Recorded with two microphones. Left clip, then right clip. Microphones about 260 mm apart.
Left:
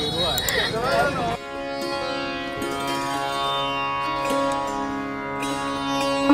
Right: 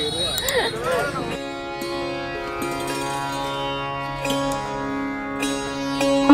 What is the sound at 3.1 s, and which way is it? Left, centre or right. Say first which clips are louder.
Music: left 2 dB; centre.